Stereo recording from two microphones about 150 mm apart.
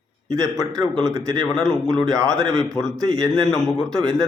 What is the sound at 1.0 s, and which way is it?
Speech, 20° right (ahead or behind).